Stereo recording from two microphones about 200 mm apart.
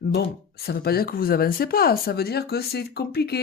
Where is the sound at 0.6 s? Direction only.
50° left (ahead or behind).